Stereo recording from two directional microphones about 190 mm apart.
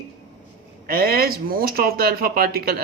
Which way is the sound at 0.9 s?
50° right (ahead or behind).